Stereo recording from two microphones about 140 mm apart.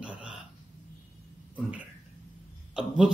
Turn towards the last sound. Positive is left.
turn(degrees=-5)  # may be behind; listen again after turning